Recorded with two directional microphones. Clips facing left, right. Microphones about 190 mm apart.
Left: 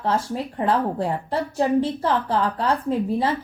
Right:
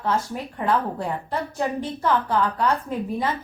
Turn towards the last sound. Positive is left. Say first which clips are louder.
# left 4 dB
turn(degrees=30)  # may be behind; listen again after turning